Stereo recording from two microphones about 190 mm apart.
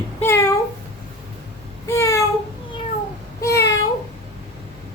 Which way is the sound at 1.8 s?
15° left (ahead or behind).